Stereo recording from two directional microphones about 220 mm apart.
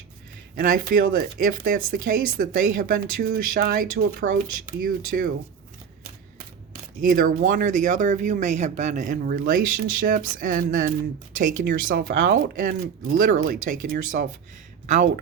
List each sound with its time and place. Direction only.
0.5 s speech: 40° right (ahead or behind)
7.0 s speech: 40° right (ahead or behind)